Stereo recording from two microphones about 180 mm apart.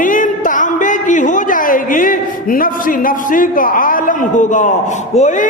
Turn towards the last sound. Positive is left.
turn(degrees=40)  # may be behind; listen again after turning